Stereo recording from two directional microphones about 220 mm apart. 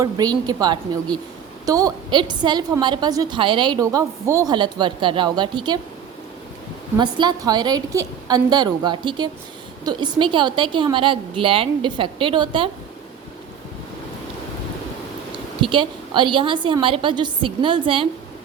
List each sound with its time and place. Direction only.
0.0 s a woman's voice: 15° right (ahead or behind)
6.9 s a woman's voice: 20° right (ahead or behind)
15.7 s a woman's voice: 20° right (ahead or behind)